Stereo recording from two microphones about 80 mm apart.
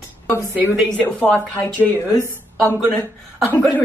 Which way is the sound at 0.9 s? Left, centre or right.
Centre.